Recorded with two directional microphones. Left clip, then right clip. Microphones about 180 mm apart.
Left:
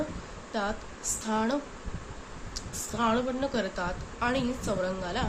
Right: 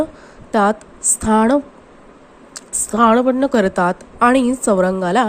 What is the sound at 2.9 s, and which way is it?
A woman's voice, 50° right (ahead or behind).